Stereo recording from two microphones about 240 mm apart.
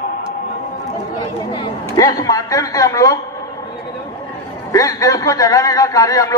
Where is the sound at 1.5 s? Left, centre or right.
Centre.